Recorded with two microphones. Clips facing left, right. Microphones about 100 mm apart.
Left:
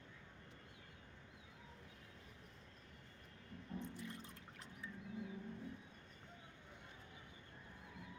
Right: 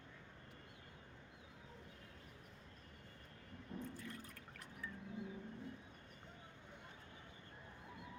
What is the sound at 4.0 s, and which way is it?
Liquid, 25° left (ahead or behind).